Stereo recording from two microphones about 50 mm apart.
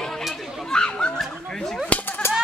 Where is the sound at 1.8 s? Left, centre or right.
Left.